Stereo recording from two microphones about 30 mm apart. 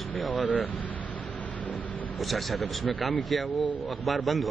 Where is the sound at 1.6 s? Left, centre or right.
Left.